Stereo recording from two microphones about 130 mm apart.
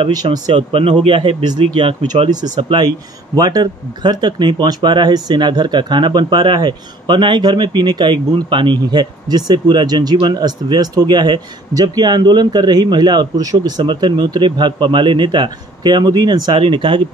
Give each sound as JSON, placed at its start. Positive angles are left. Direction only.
{"t": 0.1, "sound": "speech", "side_deg": -30}
{"t": 0.6, "sound": "speech", "side_deg": -45}
{"t": 3.3, "sound": "speech", "side_deg": -30}